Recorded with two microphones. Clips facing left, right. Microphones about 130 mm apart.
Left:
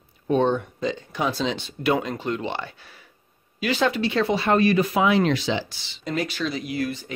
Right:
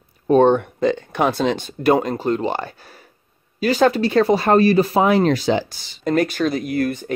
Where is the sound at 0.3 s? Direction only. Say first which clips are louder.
Right 7 dB; 55° right (ahead or behind).